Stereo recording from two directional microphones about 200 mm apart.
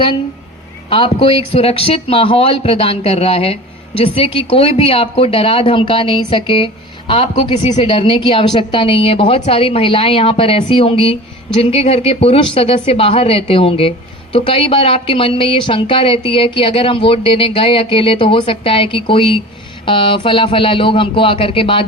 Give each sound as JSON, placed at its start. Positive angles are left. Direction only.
{"t": 0.9, "sound": "speech", "side_deg": 25}